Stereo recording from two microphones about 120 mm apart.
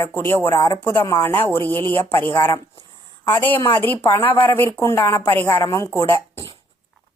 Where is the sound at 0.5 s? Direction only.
30° left (ahead or behind).